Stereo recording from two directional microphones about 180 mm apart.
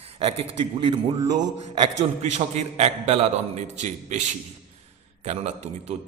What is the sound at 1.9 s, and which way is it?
A man's voice, 40° right (ahead or behind).